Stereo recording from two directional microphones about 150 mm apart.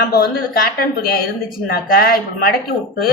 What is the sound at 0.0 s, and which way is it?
A woman's voice, 90° left.